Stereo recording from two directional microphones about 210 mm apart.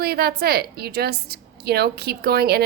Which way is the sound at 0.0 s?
50° right (ahead or behind).